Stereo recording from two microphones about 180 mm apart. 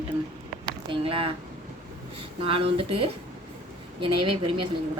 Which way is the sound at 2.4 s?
30° right (ahead or behind).